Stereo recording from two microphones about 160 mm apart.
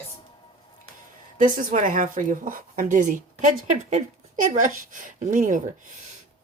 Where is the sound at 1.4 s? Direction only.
55° right (ahead or behind).